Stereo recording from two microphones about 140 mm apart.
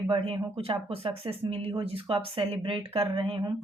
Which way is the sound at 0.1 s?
40° right (ahead or behind).